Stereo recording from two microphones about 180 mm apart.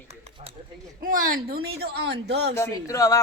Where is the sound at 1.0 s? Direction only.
50° right (ahead or behind); by 2.5 s 70° right (ahead or behind).